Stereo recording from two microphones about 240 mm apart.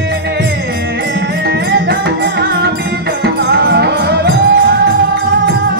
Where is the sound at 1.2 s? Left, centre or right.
Right.